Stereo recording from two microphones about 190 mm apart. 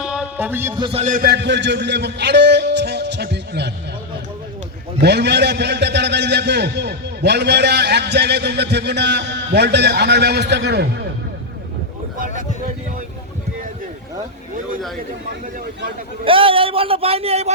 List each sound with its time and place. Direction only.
0.0 s music: 5° right (ahead or behind)
0.8 s a man's voice: 30° right (ahead or behind)
1.1 s a man's voice: 55° right (ahead or behind)
4.9 s a man's voice: 60° right (ahead or behind)
16.2 s speech: 30° right (ahead or behind)